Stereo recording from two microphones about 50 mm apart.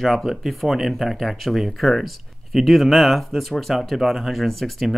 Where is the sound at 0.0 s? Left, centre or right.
Centre.